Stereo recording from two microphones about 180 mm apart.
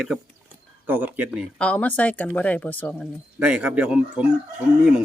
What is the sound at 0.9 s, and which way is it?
Speech, 10° right (ahead or behind).